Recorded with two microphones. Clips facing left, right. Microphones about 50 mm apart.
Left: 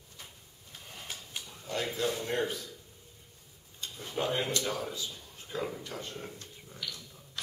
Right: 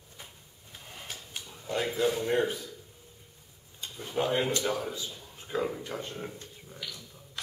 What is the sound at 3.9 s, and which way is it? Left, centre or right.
Speech, centre.